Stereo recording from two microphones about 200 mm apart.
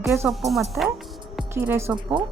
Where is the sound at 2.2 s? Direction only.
25° right (ahead or behind).